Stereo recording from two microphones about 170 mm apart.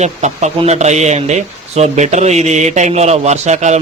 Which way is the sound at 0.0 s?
40° right (ahead or behind).